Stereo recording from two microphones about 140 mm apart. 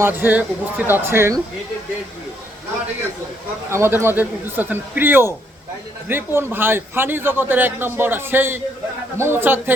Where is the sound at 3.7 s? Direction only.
20° right (ahead or behind).